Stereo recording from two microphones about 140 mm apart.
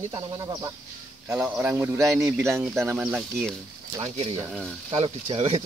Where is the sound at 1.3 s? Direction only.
10° right (ahead or behind).